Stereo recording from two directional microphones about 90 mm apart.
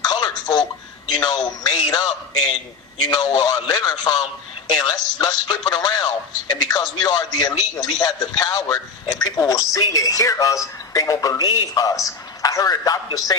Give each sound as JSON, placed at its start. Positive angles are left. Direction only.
{"t": 0.0, "sound": "a sound", "side_deg": 45}
{"t": 1.2, "sound": "a man's voice", "side_deg": 50}
{"t": 3.1, "sound": "a man's voice", "side_deg": 50}